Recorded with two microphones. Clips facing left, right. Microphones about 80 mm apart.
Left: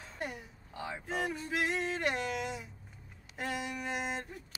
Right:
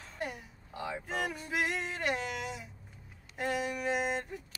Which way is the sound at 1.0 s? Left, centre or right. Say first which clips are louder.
Left 4 dB; centre.